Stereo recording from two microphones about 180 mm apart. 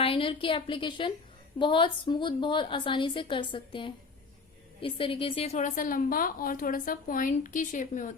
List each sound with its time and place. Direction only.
0.0 s a woman's voice: 30° left (ahead or behind); by 8.1 s 45° left (ahead or behind)